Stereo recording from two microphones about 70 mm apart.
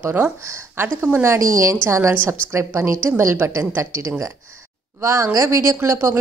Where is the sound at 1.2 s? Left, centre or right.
Right.